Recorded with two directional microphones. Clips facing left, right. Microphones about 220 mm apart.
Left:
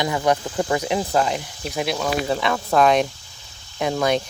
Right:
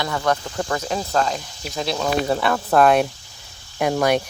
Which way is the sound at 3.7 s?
65° right (ahead or behind).